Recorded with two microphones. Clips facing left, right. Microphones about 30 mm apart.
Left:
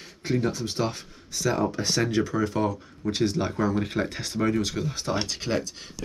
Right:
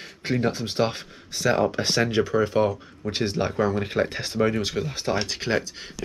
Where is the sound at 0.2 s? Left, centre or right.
Right.